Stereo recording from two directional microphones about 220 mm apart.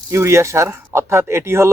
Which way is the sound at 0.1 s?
10° right (ahead or behind).